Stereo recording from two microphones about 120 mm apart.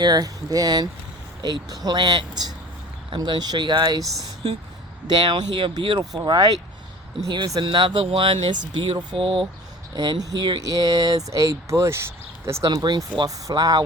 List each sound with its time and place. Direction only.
0.0 s speech: 35° right (ahead or behind)
5.1 s speech: 40° right (ahead or behind)
9.1 s speech: 50° right (ahead or behind)
9.9 s speech: 40° right (ahead or behind)
12.7 s speech: 35° right (ahead or behind)